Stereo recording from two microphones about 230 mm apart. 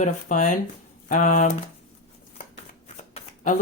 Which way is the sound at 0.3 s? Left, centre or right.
Left.